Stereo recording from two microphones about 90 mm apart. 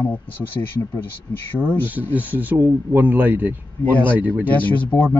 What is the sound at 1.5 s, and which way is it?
Speech, 20° left (ahead or behind).